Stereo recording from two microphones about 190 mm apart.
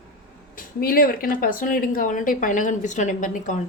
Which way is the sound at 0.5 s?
50° left (ahead or behind).